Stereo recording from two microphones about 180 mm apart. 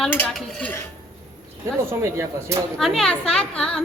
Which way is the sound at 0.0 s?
5° left (ahead or behind).